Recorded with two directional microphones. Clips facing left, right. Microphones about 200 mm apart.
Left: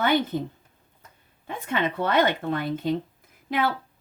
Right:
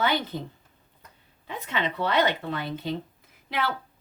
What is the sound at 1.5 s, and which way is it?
A woman's voice, 50° left (ahead or behind).